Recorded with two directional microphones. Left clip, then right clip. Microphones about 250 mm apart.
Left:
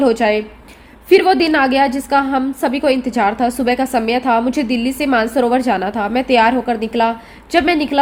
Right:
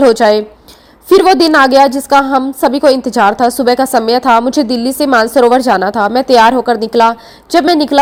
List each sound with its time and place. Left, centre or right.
0.0 s a woman's voice: right